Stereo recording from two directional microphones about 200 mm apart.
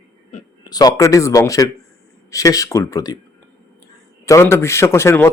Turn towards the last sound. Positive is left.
turn(degrees=10)  # may be behind; listen again after turning